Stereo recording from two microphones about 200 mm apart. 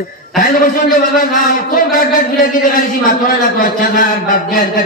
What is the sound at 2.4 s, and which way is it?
A man's voice, 45° left (ahead or behind).